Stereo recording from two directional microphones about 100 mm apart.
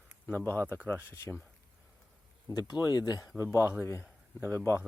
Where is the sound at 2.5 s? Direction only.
45° left (ahead or behind).